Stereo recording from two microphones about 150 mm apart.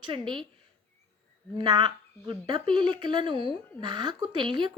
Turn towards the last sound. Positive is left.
turn(degrees=-30)  # may be behind; listen again after turning